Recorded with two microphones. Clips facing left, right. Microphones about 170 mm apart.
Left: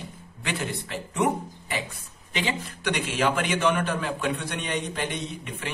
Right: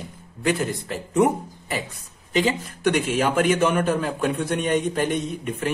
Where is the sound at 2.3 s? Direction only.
45° right (ahead or behind).